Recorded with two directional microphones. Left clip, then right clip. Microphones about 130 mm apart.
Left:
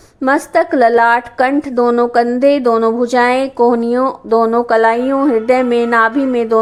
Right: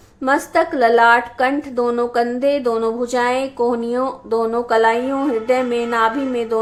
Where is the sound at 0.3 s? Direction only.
50° left (ahead or behind).